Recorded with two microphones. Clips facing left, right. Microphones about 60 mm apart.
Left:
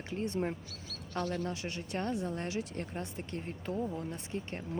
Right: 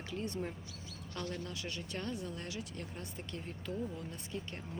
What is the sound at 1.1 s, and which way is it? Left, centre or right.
Speech, left.